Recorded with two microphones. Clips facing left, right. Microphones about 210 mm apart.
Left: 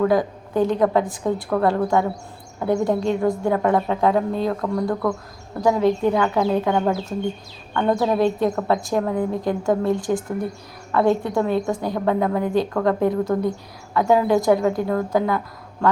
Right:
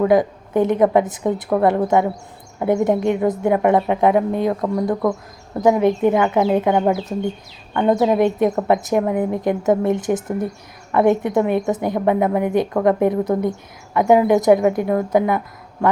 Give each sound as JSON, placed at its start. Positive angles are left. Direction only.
{"t": 0.0, "sound": "a woman's voice", "side_deg": -20}